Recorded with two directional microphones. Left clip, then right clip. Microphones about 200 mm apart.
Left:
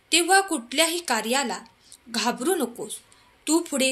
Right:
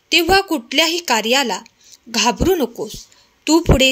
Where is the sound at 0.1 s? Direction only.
40° right (ahead or behind).